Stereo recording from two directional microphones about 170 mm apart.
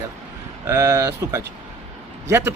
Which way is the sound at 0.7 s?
20° right (ahead or behind).